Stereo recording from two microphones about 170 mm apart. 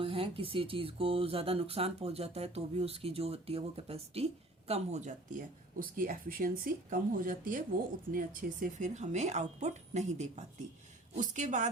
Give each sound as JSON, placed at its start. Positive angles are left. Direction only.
{"t": 0.0, "sound": "a woman's voice", "side_deg": -35}
{"t": 5.8, "sound": "a woman's voice", "side_deg": -55}
{"t": 8.8, "sound": "a woman's voice", "side_deg": -45}